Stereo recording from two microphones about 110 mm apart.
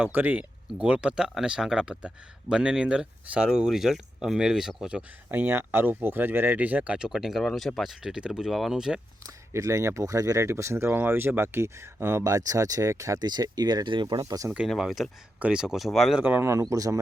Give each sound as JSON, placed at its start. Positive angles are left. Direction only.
{"t": 0.0, "sound": "speech", "side_deg": -15}
{"t": 5.3, "sound": "speech", "side_deg": -20}
{"t": 9.2, "sound": "speech", "side_deg": -30}
{"t": 14.7, "sound": "speech", "side_deg": 0}
{"t": 16.2, "sound": "speech", "side_deg": -20}